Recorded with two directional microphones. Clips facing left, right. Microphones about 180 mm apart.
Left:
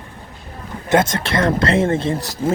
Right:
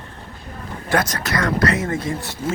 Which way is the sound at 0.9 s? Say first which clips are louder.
Left 5 dB; 25° left (ahead or behind).